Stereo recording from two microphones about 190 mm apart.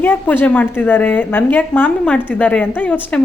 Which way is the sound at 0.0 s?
10° left (ahead or behind).